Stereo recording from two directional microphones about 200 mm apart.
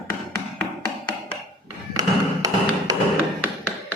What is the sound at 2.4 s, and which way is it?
Tap, 20° right (ahead or behind).